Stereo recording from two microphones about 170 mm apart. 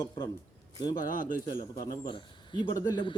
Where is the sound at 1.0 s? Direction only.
50° left (ahead or behind).